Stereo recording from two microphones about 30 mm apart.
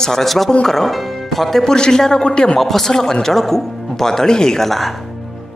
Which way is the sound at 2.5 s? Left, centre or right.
Centre.